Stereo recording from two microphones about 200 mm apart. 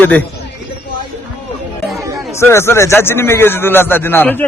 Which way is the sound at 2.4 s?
15° left (ahead or behind).